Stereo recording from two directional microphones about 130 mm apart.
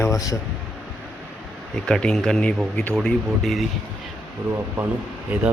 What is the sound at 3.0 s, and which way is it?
Speech, centre (ahead or behind).